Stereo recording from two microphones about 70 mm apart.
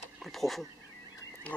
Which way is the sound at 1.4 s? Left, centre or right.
Centre.